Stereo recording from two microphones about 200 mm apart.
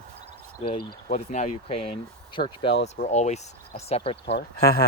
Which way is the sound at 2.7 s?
60° left (ahead or behind).